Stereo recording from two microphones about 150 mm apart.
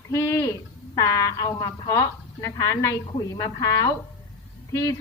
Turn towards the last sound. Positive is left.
turn(degrees=20)  # may be behind; listen again after turning